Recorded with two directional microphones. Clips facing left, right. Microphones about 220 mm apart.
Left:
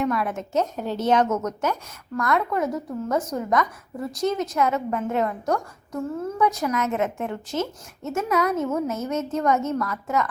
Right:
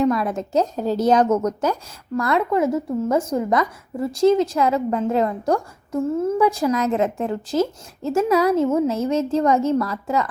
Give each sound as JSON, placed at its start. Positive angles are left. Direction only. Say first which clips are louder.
{"t": 0.0, "sound": "a woman's voice", "louder": "right 5 dB", "side_deg": -35}